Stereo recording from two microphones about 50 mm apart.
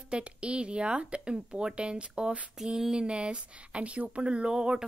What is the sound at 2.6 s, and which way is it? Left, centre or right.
Speech, centre.